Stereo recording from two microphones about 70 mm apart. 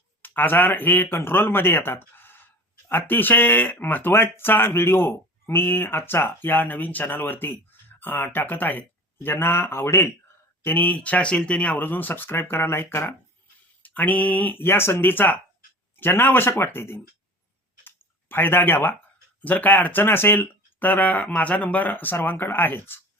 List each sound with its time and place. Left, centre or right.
0.2 s speech: left
10.6 s speech: left
17.8 s clicking: left
19.4 s speech: left